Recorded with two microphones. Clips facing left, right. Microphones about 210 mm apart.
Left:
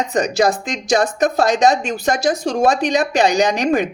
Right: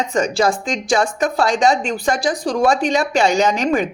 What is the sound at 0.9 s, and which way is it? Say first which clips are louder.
A woman's voice: left 2 dB; 40° left (ahead or behind).